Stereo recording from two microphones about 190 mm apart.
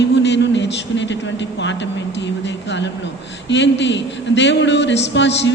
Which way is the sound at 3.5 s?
65° left (ahead or behind).